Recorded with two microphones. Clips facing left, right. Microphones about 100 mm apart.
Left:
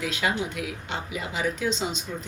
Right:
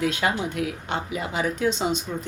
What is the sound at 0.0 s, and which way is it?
Speech, 40° right (ahead or behind).